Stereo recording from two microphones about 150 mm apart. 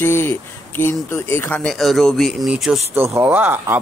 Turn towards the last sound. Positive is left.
turn(degrees=-15)  # may be behind; listen again after turning